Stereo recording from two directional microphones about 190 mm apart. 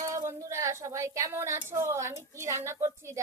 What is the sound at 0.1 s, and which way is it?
Speech, 15° right (ahead or behind).